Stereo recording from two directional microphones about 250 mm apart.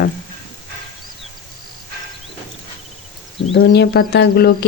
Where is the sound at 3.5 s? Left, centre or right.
Left.